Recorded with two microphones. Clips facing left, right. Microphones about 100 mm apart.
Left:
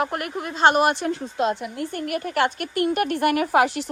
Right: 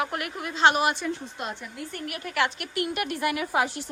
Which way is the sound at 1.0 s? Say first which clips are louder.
Left 8 dB; 90° left.